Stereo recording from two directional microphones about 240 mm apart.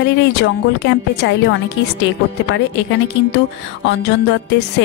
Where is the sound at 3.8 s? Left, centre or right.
Left.